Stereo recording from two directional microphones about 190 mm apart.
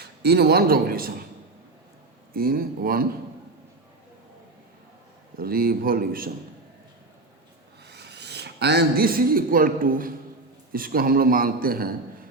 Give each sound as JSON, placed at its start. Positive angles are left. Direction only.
{"t": 0.0, "sound": "a man's voice", "side_deg": -60}
{"t": 2.3, "sound": "a man's voice", "side_deg": -50}
{"t": 5.4, "sound": "a man's voice", "side_deg": -50}
{"t": 7.9, "sound": "a man's voice", "side_deg": -60}